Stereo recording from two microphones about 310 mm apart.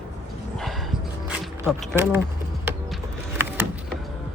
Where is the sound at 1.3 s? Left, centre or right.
Centre.